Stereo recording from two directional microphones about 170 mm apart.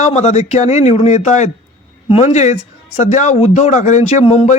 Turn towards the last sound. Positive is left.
turn(degrees=40)  # may be behind; listen again after turning